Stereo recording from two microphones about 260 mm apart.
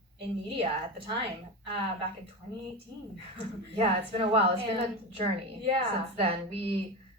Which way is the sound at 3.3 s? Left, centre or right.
Right.